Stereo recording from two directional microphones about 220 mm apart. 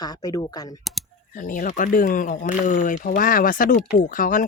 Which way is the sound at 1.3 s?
35° left (ahead or behind).